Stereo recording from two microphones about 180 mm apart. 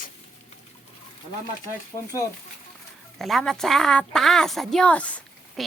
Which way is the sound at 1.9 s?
20° left (ahead or behind).